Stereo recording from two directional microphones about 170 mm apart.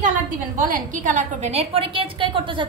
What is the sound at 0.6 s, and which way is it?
A woman's voice, 50° right (ahead or behind).